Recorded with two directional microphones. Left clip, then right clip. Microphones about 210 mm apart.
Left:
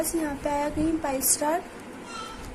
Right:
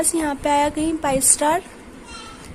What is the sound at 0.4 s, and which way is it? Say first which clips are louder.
Speech: right 9 dB; 50° right (ahead or behind).